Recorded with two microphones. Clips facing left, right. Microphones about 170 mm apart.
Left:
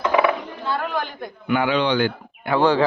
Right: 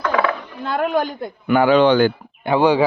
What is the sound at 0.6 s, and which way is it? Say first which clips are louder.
Speech: right 7 dB; 55° right (ahead or behind).